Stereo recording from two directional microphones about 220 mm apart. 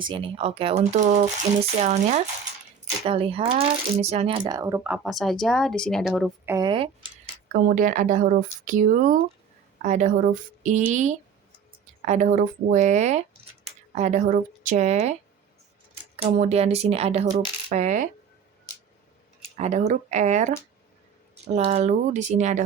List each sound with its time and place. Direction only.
0.0 s speech: 20° right (ahead or behind); by 6.3 s centre (ahead or behind)
6.4 s speech: 15° right (ahead or behind); by 15.1 s 30° right (ahead or behind)
16.1 s speech: 30° right (ahead or behind)
19.5 s speech: 30° right (ahead or behind)